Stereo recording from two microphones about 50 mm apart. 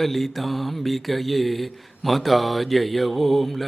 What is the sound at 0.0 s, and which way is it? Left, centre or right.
Speech, centre.